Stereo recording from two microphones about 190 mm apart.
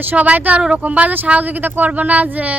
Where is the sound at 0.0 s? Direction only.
10° right (ahead or behind).